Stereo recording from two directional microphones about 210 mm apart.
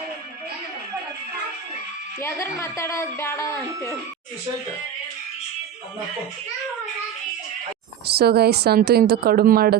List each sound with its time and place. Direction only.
2.2 s a woman's voice: 15° left (ahead or behind)
8.0 s a woman's voice: 50° right (ahead or behind)